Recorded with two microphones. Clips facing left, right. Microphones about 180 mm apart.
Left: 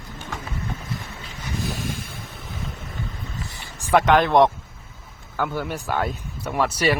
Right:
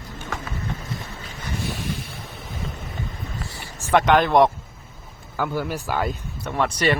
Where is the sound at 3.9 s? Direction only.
Centre (ahead or behind).